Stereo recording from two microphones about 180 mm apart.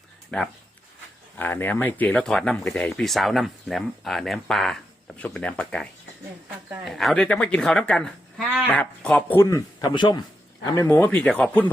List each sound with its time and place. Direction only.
0.3 s speech: 5° left (ahead or behind)
9.4 s speech: 20° left (ahead or behind)
10.8 s speech: 10° left (ahead or behind)